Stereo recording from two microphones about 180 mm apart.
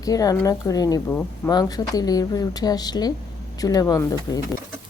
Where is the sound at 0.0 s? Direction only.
20° left (ahead or behind).